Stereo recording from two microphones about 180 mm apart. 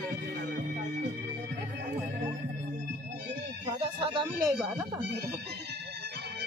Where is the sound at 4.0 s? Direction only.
25° right (ahead or behind).